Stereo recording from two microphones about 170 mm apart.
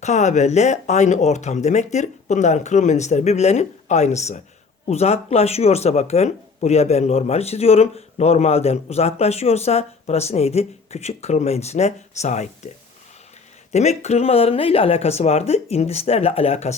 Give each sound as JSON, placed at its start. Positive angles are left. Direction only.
{"t": 0.0, "sound": "speech", "side_deg": 45}
{"t": 13.7, "sound": "speech", "side_deg": 40}